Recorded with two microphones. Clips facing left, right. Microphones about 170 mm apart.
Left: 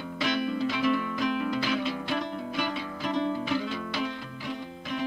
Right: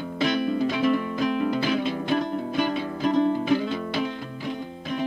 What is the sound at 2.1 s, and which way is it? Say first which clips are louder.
Music: right 6 dB; 45° right (ahead or behind).